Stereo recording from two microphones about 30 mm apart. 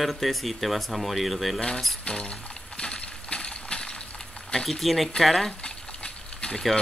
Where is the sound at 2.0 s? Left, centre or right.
Left.